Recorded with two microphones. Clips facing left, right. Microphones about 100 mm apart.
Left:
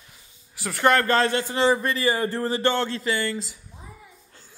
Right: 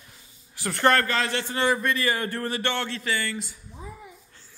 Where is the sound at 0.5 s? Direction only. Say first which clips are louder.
Left 1 dB; 5° left (ahead or behind).